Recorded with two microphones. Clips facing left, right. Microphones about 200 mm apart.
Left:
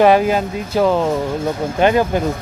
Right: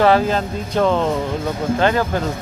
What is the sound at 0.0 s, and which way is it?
Speech, 15° left (ahead or behind).